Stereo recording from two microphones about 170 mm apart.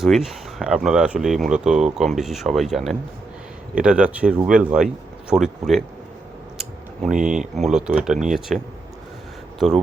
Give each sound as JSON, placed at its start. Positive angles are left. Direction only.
{"t": 0.0, "sound": "speech", "side_deg": -5}
{"t": 7.0, "sound": "speech", "side_deg": -45}
{"t": 7.5, "sound": "speech", "side_deg": 0}